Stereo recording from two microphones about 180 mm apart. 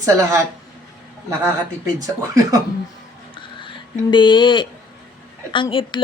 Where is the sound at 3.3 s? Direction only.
25° left (ahead or behind).